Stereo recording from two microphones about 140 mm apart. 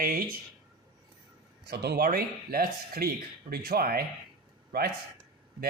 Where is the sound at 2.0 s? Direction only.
90° right.